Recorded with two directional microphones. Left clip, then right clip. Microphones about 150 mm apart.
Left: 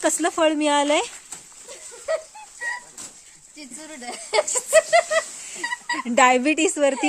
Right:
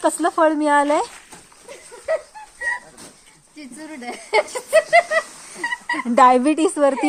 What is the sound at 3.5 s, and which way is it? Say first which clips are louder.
A woman's voice: right 3 dB; 10° left (ahead or behind).